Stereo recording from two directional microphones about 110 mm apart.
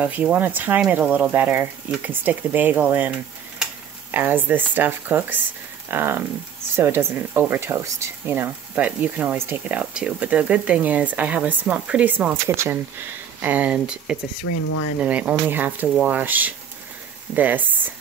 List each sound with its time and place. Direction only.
0.0 s speech: 15° right (ahead or behind)